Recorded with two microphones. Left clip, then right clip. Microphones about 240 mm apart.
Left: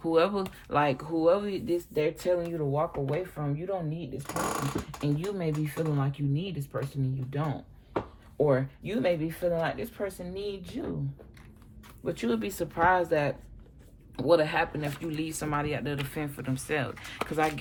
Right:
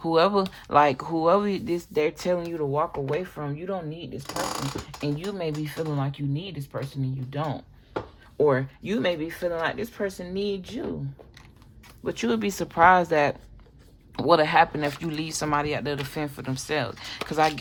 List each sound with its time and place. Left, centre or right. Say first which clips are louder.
0.0 s speech: right 4 dB; centre; by 3.8 s right
5.0 s speech: right 3 dB; right
12.0 s speech: right 4 dB; right; by 17.5 s centre